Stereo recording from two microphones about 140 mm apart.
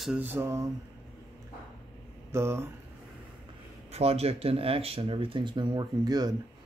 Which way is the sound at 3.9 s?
45° right (ahead or behind).